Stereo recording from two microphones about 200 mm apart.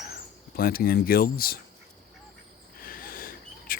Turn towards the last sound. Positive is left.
turn(degrees=45)  # may be behind; listen again after turning